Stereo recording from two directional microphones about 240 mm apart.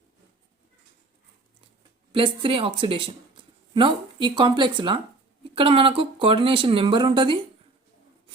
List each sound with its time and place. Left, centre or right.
2.1 s speech: right